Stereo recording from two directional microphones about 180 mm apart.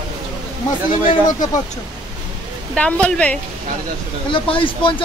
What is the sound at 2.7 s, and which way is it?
Speech, 5° left (ahead or behind).